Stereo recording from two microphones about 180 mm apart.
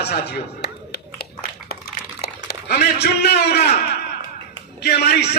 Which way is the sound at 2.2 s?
65° left (ahead or behind).